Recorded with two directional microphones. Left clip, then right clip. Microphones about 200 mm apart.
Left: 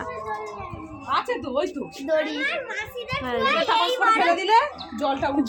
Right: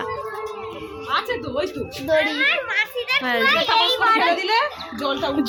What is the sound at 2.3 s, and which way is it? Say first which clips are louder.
Children playing: right 7 dB; 35° left (ahead or behind).